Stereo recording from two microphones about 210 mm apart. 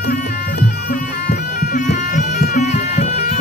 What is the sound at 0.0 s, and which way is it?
Music, 50° left (ahead or behind).